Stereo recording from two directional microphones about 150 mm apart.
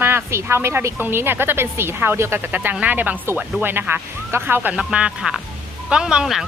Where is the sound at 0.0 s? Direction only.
15° right (ahead or behind).